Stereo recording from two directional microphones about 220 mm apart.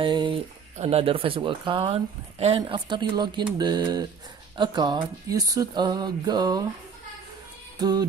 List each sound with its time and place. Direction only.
0.0 s a sound: 20° right (ahead or behind)
0.7 s speech: 25° right (ahead or behind)
7.8 s speech: 20° right (ahead or behind)